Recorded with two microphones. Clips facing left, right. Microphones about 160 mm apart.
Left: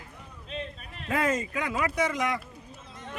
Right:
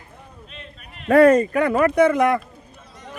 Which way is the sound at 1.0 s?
65° right (ahead or behind).